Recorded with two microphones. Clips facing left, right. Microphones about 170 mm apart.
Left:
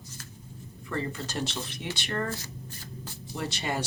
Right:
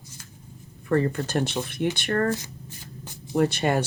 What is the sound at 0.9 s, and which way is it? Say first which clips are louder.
Speech: right 10 dB; 55° right (ahead or behind).